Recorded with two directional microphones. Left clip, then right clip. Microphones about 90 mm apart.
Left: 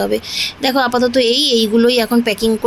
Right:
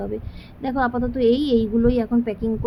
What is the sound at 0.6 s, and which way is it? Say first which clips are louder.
A woman's voice: left 8 dB; 35° left (ahead or behind).